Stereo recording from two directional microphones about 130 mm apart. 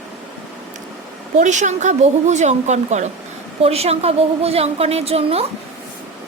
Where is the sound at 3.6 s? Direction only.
50° right (ahead or behind).